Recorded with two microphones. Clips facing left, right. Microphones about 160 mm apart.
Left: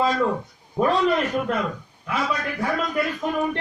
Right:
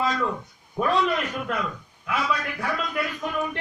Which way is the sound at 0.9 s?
40° left (ahead or behind).